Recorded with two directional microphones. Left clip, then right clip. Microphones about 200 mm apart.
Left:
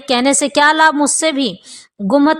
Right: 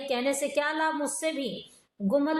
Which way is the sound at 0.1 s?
50° left (ahead or behind).